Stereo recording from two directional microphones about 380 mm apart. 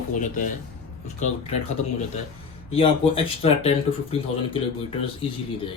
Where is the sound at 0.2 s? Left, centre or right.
Left.